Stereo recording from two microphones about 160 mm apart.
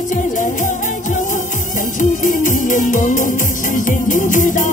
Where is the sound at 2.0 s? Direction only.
55° left (ahead or behind).